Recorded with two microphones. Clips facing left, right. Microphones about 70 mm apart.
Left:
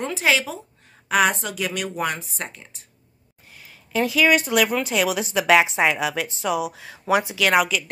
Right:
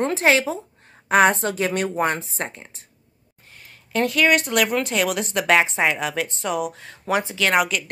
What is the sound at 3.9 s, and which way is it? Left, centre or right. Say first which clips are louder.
Speech: even; centre.